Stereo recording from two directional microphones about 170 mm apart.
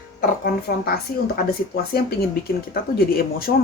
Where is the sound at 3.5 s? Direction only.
80° left.